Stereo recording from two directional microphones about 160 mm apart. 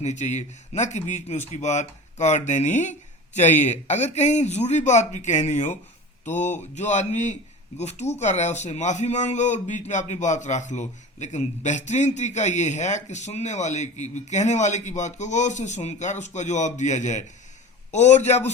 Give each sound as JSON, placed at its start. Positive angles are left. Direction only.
{"t": 0.0, "sound": "a man's voice", "side_deg": 45}
{"t": 6.7, "sound": "a man's voice", "side_deg": 45}